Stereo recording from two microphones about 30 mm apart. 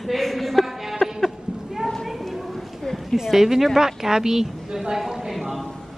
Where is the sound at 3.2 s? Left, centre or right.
Centre.